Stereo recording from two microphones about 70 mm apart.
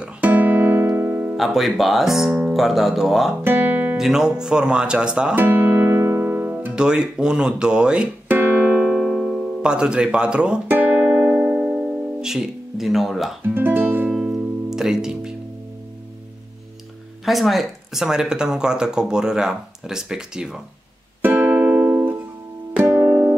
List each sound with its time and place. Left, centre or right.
0.2 s guitar: right
1.3 s speech: centre
3.4 s guitar: right
3.9 s speech: centre
5.3 s music: right
6.7 s speech: centre
8.3 s music: right
9.1 s speech: centre
10.7 s music: right; by 13.4 s centre
13.5 s speech: right
14.1 s music: centre
17.2 s speech: centre
21.2 s music: right